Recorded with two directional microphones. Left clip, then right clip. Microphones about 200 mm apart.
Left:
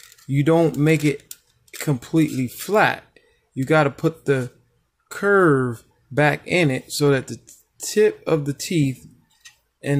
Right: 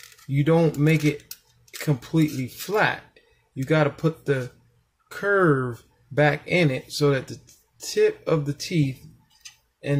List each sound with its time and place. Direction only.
0.3 s speech: 35° left (ahead or behind)